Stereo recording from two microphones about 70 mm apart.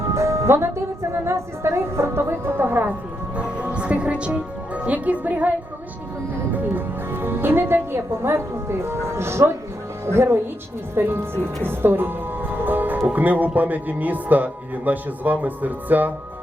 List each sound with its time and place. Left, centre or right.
0.1 s music: right
1.2 s a woman's voice: right
3.3 s a woman's voice: centre